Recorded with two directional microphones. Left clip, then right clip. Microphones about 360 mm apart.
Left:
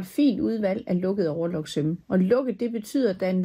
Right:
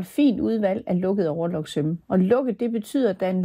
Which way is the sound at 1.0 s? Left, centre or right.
Centre.